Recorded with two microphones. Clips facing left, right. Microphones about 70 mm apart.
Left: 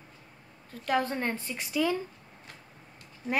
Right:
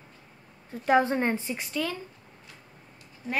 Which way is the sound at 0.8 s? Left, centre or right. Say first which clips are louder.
Right 6 dB; right.